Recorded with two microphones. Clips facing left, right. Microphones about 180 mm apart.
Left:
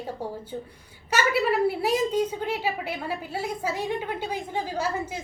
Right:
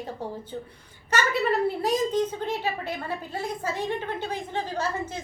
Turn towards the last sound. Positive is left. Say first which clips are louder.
# left 1 dB
turn(degrees=10)  # may be behind; listen again after turning